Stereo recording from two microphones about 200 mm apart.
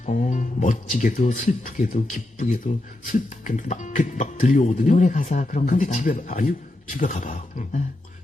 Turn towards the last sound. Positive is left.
turn(degrees=40)  # may be behind; listen again after turning